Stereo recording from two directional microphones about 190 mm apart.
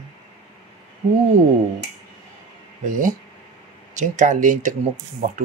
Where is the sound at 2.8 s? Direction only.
45° right (ahead or behind).